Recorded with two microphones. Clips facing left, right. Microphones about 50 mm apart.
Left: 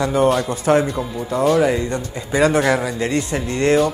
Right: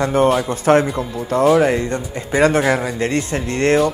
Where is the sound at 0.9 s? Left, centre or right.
Centre.